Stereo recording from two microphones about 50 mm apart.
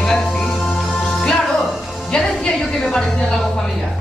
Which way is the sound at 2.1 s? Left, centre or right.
Centre.